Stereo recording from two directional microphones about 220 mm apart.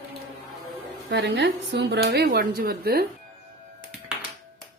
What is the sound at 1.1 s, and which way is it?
Speech, 50° right (ahead or behind).